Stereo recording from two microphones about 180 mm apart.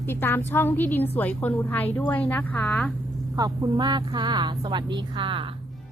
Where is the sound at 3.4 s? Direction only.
20° right (ahead or behind).